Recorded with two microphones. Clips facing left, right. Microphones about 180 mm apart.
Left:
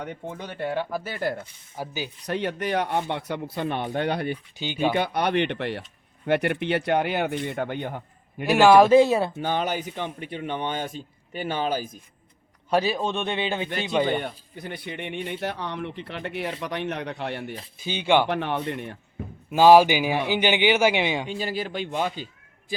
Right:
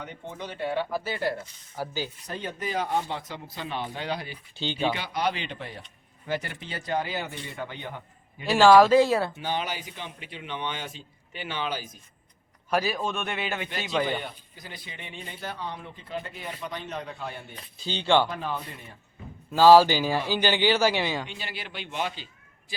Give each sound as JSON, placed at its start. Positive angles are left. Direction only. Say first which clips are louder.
{"t": 0.3, "sound": "a man's voice", "louder": "even", "side_deg": 55}
{"t": 1.7, "sound": "speech", "louder": "even", "side_deg": 15}
{"t": 2.2, "sound": "speech", "louder": "left 6 dB", "side_deg": 75}
{"t": 4.5, "sound": "speech", "louder": "even", "side_deg": 15}
{"t": 4.9, "sound": "speech", "louder": "left 7 dB", "side_deg": 60}
{"t": 8.4, "sound": "speech", "louder": "left 2 dB", "side_deg": 15}
{"t": 9.4, "sound": "a man's voice", "louder": "left 5 dB", "side_deg": 50}
{"t": 12.7, "sound": "speech", "louder": "left 4 dB", "side_deg": 30}
{"t": 14.2, "sound": "speech", "louder": "left 6 dB", "side_deg": 60}
{"t": 17.8, "sound": "speech", "louder": "left 2 dB", "side_deg": 15}
{"t": 18.3, "sound": "speech", "louder": "left 7 dB", "side_deg": 75}
{"t": 19.5, "sound": "speech", "louder": "left 1 dB", "side_deg": 20}
{"t": 21.2, "sound": "a man's voice", "louder": "left 10 dB", "side_deg": 40}